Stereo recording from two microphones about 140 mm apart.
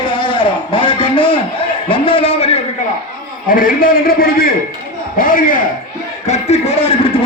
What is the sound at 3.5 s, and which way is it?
Speech, 85° left.